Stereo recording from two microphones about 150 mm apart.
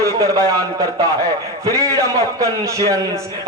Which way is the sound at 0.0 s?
20° right (ahead or behind).